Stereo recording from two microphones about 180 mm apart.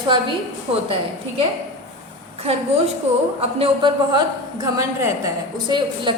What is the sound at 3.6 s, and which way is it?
A woman's voice, 25° right (ahead or behind).